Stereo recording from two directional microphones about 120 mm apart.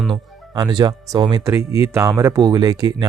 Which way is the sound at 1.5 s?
25° right (ahead or behind).